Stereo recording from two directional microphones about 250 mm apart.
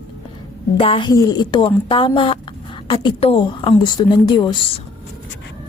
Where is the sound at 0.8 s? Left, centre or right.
Left.